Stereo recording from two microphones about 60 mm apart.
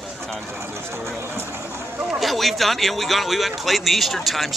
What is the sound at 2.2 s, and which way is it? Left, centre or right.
Speech, centre.